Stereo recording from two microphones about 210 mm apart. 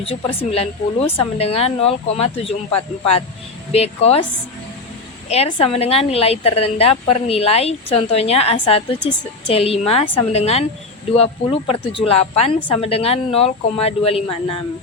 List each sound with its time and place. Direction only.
0.0 s a woman's voice: 25° left (ahead or behind)
3.7 s a woman's voice: 30° left (ahead or behind)
5.3 s a woman's voice: 25° left (ahead or behind)